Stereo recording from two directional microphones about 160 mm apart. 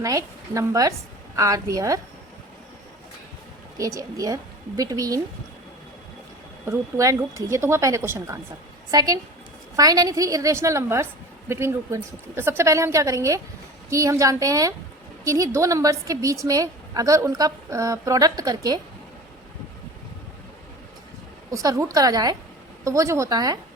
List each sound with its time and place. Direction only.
0.0 s a woman's voice: 20° right (ahead or behind)
3.8 s a woman's voice: 20° right (ahead or behind)
6.7 s a woman's voice: 20° right (ahead or behind)
21.5 s a woman's voice: 20° right (ahead or behind)